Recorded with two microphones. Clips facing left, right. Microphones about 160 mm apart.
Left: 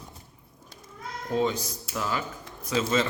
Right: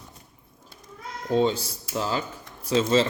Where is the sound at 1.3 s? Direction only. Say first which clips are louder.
Right 4 dB; 30° right (ahead or behind).